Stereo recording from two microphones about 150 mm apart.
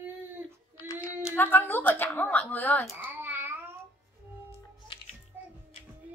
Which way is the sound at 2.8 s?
15° right (ahead or behind).